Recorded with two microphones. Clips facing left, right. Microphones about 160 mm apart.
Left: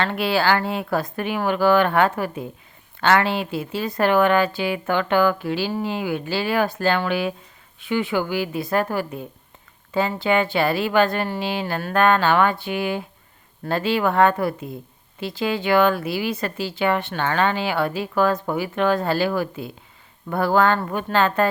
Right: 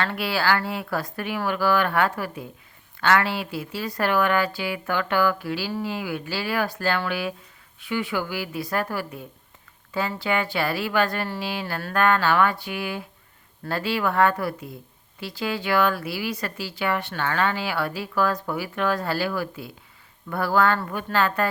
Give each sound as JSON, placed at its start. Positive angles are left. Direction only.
{"t": 0.0, "sound": "speech", "side_deg": 25}